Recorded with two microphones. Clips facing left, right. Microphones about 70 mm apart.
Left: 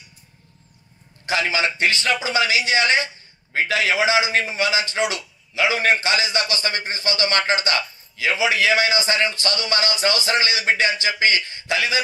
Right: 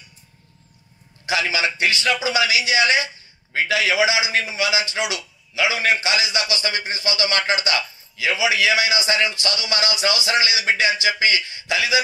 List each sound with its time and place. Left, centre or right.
1.2 s a man's voice: left